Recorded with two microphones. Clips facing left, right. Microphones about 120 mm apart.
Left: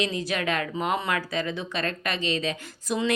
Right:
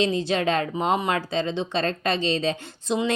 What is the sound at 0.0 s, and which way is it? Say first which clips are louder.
Speech: right 5 dB; 25° right (ahead or behind).